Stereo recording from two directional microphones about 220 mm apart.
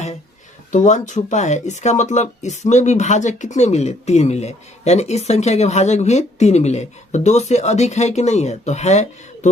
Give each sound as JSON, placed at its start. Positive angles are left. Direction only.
{"t": 0.7, "sound": "speech", "side_deg": 35}